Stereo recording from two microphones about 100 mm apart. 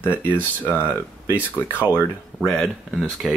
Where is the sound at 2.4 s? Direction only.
Centre (ahead or behind).